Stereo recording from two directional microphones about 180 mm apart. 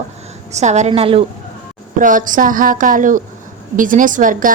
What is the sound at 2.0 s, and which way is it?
Speech, 45° right (ahead or behind).